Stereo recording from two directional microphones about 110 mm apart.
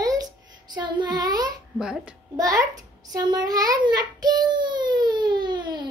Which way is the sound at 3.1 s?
35° right (ahead or behind).